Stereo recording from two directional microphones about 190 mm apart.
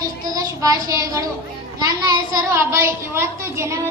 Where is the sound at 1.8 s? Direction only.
20° right (ahead or behind).